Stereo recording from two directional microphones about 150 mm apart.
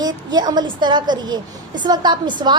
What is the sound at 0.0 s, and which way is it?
A woman's voice, 25° right (ahead or behind).